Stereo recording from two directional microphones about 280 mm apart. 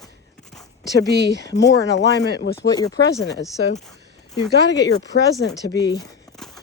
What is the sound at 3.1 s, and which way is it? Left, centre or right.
Speech, left.